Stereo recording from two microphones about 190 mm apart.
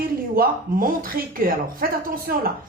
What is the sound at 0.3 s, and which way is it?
Speech, 50° right (ahead or behind).